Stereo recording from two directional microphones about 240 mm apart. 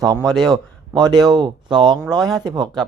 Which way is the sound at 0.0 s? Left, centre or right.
Centre.